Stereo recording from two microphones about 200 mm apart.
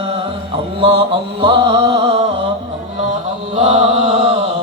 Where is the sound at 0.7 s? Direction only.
25° right (ahead or behind).